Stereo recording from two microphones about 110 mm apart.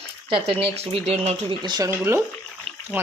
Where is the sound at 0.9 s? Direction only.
70° right (ahead or behind).